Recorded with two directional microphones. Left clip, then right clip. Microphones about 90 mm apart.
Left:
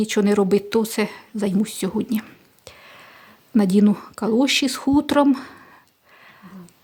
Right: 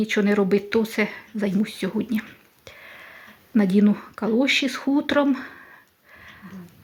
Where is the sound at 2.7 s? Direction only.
60° left (ahead or behind).